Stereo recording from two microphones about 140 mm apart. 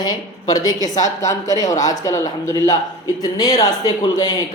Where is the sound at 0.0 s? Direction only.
30° left (ahead or behind).